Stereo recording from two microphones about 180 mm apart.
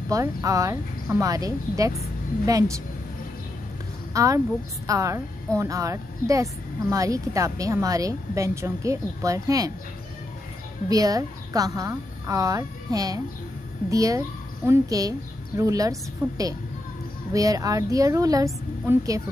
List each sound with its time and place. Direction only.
0.1 s a woman's voice: 20° right (ahead or behind)
4.1 s a woman's voice: 20° right (ahead or behind)
10.9 s a woman's voice: 20° right (ahead or behind)